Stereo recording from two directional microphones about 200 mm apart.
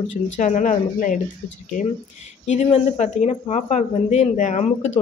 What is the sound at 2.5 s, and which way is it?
Speech, 35° left (ahead or behind).